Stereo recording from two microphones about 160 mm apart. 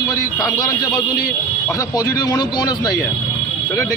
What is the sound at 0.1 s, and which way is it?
A man's voice, 20° left (ahead or behind).